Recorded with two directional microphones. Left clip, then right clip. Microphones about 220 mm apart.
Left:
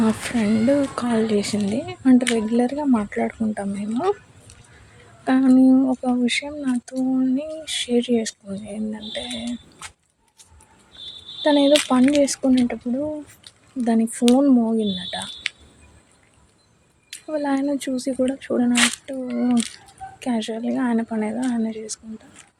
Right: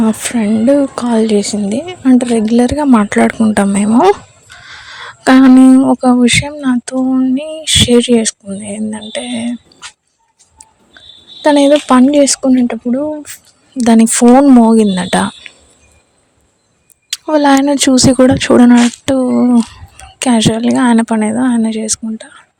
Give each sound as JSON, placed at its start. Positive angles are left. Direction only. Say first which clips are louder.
{"t": 0.0, "sound": "speech", "louder": "right 7 dB", "side_deg": -35}
{"t": 5.2, "sound": "speech", "louder": "right 11 dB", "side_deg": -45}
{"t": 11.4, "sound": "speech", "louder": "right 8 dB", "side_deg": -40}
{"t": 17.1, "sound": "speech", "louder": "right 15 dB", "side_deg": -45}